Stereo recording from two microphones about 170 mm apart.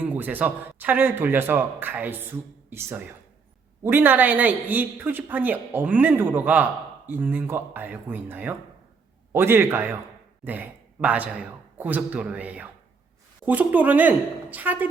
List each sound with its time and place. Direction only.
0.0 s speech: 10° right (ahead or behind)